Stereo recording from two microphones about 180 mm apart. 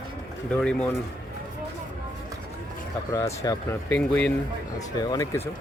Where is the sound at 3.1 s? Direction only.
20° left (ahead or behind).